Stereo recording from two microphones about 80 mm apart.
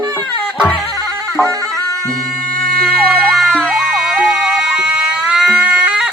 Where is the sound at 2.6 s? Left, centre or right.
Centre.